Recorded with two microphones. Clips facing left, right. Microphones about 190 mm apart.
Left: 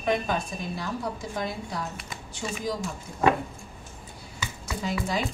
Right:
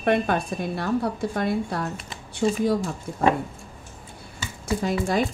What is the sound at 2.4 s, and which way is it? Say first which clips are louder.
Speech: right 11 dB; 50° right (ahead or behind).